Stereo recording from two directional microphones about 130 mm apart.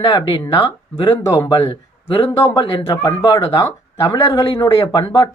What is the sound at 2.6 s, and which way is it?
Speech, 45° left (ahead or behind).